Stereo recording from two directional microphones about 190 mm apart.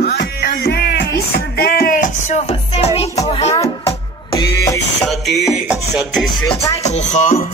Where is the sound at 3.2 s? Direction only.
35° left (ahead or behind).